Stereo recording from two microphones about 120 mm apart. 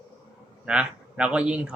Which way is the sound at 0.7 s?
10° right (ahead or behind).